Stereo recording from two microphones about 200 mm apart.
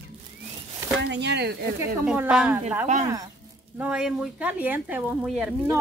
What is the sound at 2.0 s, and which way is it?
Speech, 5° right (ahead or behind).